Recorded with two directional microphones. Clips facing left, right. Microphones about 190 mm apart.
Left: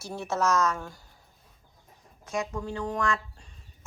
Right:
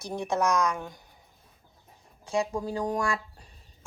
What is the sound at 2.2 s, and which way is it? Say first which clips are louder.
Speech: right 3 dB; 30° right (ahead or behind).